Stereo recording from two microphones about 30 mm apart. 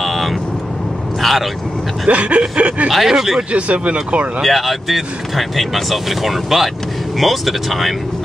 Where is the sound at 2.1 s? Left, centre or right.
Right.